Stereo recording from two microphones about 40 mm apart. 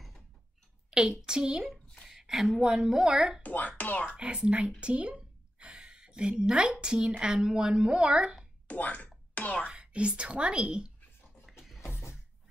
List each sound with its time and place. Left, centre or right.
1.2 s speech: centre
2.1 s a sound: centre
2.6 s a woman's voice: centre
3.4 s speech: left
4.1 s speech: right
5.6 s a sound: right
6.8 s speech: right
8.6 s a sound: left
9.7 s speech: right
11.4 s music: centre